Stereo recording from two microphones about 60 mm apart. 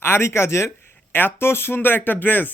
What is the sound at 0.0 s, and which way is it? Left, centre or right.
Speech, left.